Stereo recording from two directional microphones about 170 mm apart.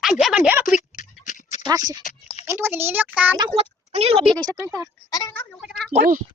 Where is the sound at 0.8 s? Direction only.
45° left (ahead or behind).